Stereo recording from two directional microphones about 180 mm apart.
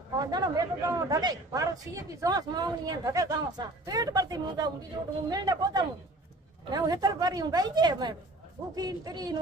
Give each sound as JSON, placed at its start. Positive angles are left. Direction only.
{"t": 0.2, "sound": "a man's voice", "side_deg": -20}